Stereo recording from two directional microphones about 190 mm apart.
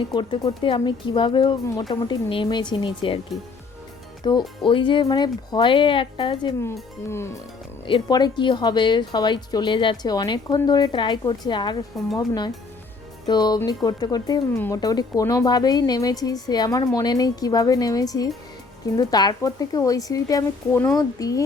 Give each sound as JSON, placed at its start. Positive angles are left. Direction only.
{"t": 0.0, "sound": "speech", "side_deg": 25}
{"t": 4.2, "sound": "speech", "side_deg": 25}
{"t": 7.1, "sound": "speech", "side_deg": 15}
{"t": 7.9, "sound": "speech", "side_deg": 25}